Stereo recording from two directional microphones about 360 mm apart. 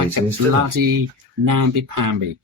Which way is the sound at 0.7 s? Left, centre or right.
Right.